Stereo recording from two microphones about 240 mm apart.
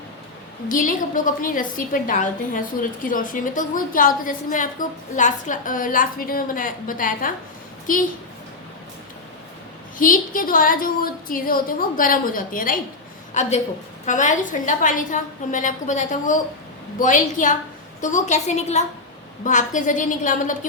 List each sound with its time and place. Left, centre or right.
0.7 s a woman's voice: left
10.0 s a woman's voice: left